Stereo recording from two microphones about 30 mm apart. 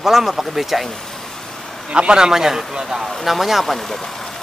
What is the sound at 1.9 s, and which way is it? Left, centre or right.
Speech, right.